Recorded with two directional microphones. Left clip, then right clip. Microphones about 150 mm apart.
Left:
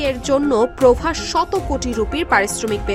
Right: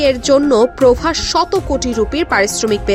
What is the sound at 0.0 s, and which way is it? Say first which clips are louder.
Speech: right 6 dB; 30° right (ahead or behind).